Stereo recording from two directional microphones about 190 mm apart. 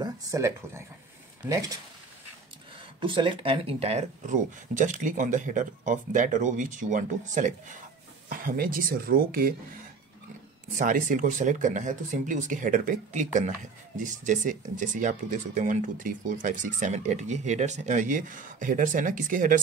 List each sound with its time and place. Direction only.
0.0 s speech: 15° right (ahead or behind)
3.0 s speech: 25° right (ahead or behind); by 9.6 s 50° right (ahead or behind)
10.7 s speech: 45° right (ahead or behind)